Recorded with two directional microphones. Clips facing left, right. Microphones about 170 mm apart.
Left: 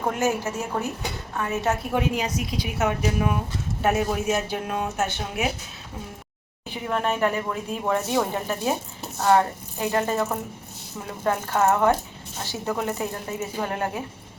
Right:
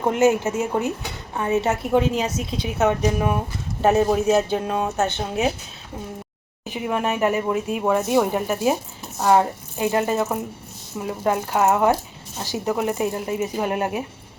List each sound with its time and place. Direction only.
0.1 s speech: 20° right (ahead or behind)
6.7 s speech: 15° right (ahead or behind)